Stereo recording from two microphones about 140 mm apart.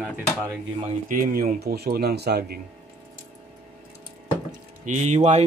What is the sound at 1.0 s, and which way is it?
Speech, 90° right.